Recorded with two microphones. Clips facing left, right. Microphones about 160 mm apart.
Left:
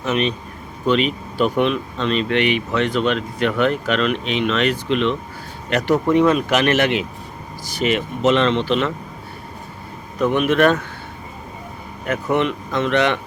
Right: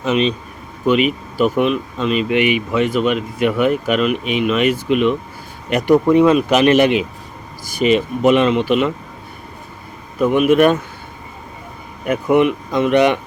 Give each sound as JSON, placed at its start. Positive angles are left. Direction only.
{"t": 0.1, "sound": "speech", "side_deg": -20}
{"t": 0.9, "sound": "speech", "side_deg": -10}
{"t": 10.2, "sound": "speech", "side_deg": -10}
{"t": 12.0, "sound": "speech", "side_deg": -10}